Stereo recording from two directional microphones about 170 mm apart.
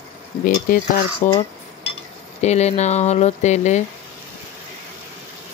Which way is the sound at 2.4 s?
40° left (ahead or behind).